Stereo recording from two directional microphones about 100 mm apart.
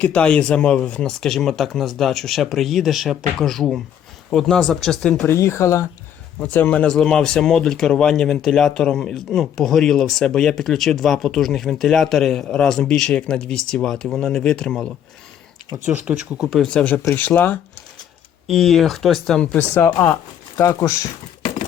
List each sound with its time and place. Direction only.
0.0 s speech: 10° left (ahead or behind)
5.2 s speech: 25° left (ahead or behind)
6.4 s speech: 15° left (ahead or behind)
15.9 s speech: 10° right (ahead or behind); by 17.6 s 15° left (ahead or behind)
18.4 s speech: centre (ahead or behind)
19.7 s speech: 25° left (ahead or behind)